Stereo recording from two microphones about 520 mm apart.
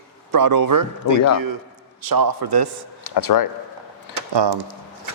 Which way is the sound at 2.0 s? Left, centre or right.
Right.